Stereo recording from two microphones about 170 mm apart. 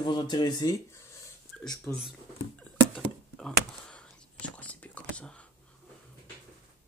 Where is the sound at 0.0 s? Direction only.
25° left (ahead or behind).